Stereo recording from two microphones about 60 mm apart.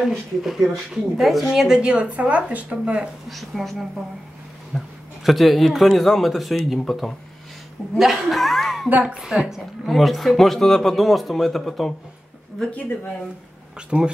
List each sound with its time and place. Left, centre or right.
0.0 s a man's voice: centre
3.3 s a man's voice: centre
9.0 s speech: centre
9.8 s a man's voice: centre
13.7 s speech: centre